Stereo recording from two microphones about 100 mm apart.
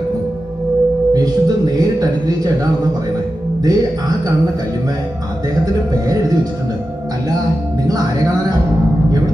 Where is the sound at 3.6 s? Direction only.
40° right (ahead or behind).